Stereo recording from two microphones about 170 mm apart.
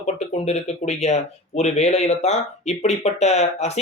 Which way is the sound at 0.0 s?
40° left (ahead or behind).